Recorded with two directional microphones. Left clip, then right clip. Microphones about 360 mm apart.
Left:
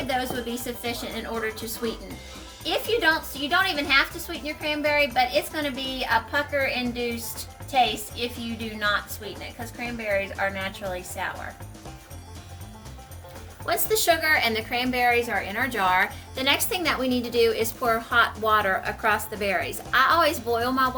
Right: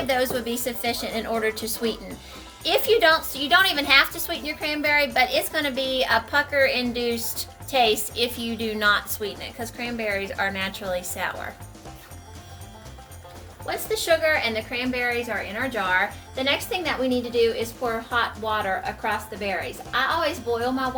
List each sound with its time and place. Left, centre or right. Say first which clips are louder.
0.1 s a woman's voice: right 4 dB; centre
13.7 s speech: even; left